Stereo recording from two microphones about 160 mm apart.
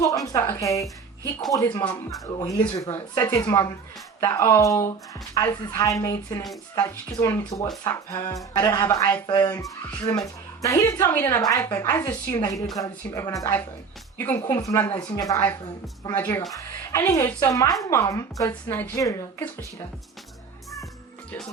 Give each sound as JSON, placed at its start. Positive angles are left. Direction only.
{"t": 0.0, "sound": "a woman's voice", "side_deg": 20}